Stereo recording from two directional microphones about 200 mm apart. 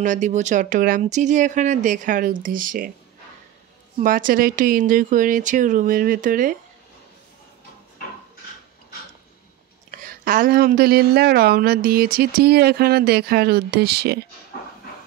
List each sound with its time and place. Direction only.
0.0 s speech: 40° right (ahead or behind)
4.0 s a woman's voice: 45° right (ahead or behind)
9.8 s a woman's voice: 40° right (ahead or behind)